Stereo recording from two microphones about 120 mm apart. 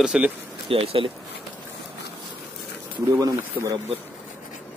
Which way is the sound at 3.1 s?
30° right (ahead or behind).